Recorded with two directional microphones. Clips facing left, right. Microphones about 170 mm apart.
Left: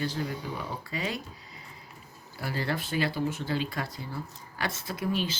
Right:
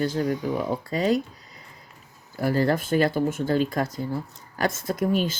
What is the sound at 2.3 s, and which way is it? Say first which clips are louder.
Speech: right 10 dB; 45° right (ahead or behind).